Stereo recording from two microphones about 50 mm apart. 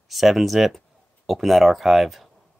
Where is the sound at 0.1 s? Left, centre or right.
Centre.